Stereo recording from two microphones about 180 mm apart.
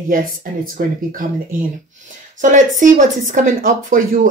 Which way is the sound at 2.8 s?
45° right (ahead or behind).